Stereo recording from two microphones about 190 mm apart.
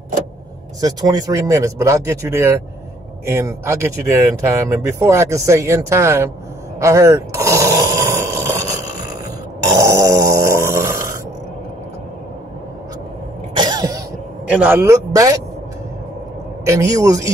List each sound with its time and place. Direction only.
0.7 s speech: 20° right (ahead or behind)
6.8 s snoring: 15° right (ahead or behind)
9.7 s a sound: 15° right (ahead or behind)
13.6 s cough: 20° right (ahead or behind)
14.5 s speech: 10° right (ahead or behind)
16.6 s speech: 15° right (ahead or behind)